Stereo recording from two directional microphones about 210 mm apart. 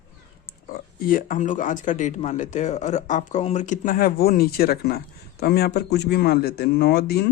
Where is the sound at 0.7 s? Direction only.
45° left (ahead or behind).